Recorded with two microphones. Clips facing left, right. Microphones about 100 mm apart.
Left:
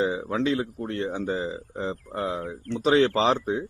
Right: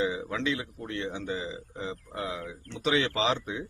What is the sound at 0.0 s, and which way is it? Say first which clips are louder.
A man's voice: left 5 dB; 35° left (ahead or behind).